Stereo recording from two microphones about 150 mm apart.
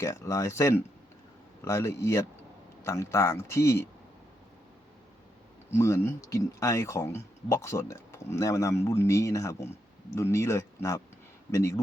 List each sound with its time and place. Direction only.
0.0 s speech: 20° left (ahead or behind)
5.7 s speech: 20° left (ahead or behind)